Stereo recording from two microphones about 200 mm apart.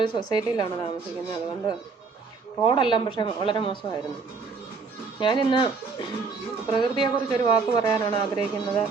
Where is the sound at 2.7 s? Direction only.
25° left (ahead or behind).